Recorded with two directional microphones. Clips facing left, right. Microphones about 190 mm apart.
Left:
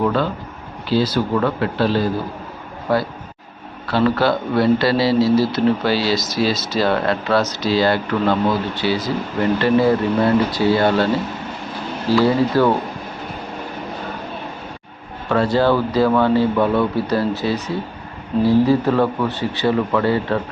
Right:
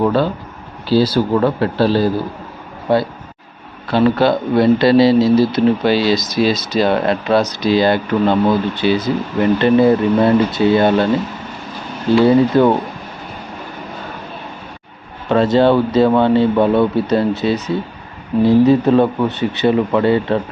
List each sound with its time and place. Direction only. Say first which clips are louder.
0.0 s a man's voice: right 4 dB; 35° right (ahead or behind)
12.1 s a man's voice: right 5 dB; 20° right (ahead or behind)
15.3 s a man's voice: right 4 dB; 20° right (ahead or behind)